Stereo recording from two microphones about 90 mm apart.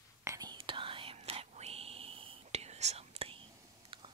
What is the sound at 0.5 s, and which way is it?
Whispering, 70° right (ahead or behind).